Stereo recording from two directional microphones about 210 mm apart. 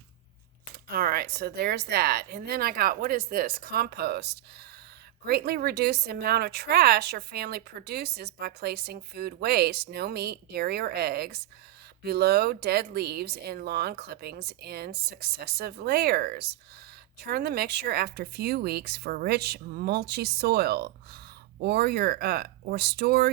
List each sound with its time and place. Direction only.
0.9 s speech: 45° right (ahead or behind)